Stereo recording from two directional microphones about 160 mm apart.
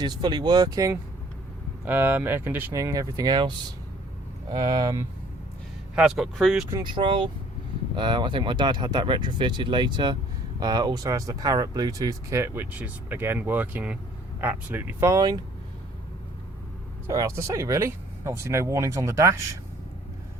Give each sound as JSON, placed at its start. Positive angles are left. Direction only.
{"t": 0.0, "sound": "speech", "side_deg": -25}
{"t": 1.8, "sound": "speech", "side_deg": -10}
{"t": 6.0, "sound": "speech", "side_deg": 0}
{"t": 6.7, "sound": "speech", "side_deg": -25}
{"t": 17.1, "sound": "speech", "side_deg": -20}